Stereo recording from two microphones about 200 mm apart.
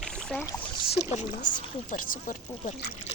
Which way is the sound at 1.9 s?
40° left (ahead or behind).